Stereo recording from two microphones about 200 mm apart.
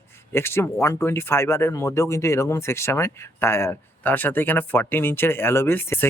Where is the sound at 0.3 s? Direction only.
10° left (ahead or behind).